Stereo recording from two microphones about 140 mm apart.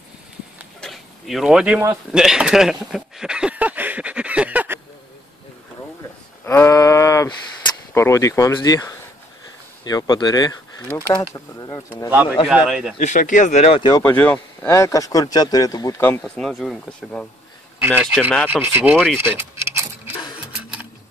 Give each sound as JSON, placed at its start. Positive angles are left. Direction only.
{"t": 0.7, "sound": "a sound", "side_deg": 0}
{"t": 2.1, "sound": "speech", "side_deg": -5}
{"t": 6.4, "sound": "a sound", "side_deg": 15}
{"t": 7.9, "sound": "speech", "side_deg": 20}
{"t": 10.9, "sound": "speech", "side_deg": 20}
{"t": 12.1, "sound": "a man's voice", "side_deg": -10}
{"t": 13.0, "sound": "speech", "side_deg": 60}
{"t": 13.9, "sound": "speech", "side_deg": 15}
{"t": 16.0, "sound": "speech", "side_deg": 10}
{"t": 17.7, "sound": "a man's voice", "side_deg": -15}